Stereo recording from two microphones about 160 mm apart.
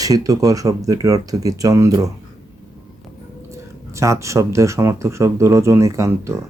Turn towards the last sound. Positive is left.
turn(degrees=-20)  # may be behind; listen again after turning